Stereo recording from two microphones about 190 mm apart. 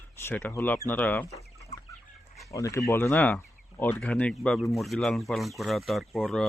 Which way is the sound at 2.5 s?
15° left (ahead or behind).